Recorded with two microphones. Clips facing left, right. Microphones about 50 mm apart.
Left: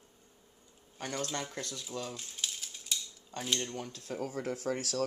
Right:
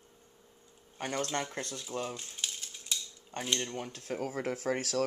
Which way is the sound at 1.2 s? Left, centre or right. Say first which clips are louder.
Right 3 dB; right.